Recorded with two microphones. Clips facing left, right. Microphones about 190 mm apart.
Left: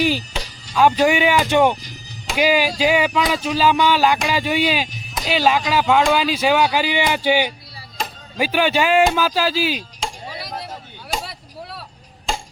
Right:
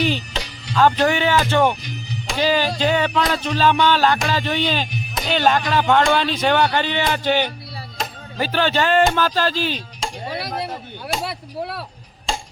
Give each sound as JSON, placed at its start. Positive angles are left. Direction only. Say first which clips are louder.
{"t": 0.7, "sound": "speech", "louder": "left 1 dB", "side_deg": 10}
{"t": 10.2, "sound": "a sound", "louder": "right 5 dB", "side_deg": -65}
{"t": 11.3, "sound": "chop", "louder": "right 8 dB", "side_deg": -65}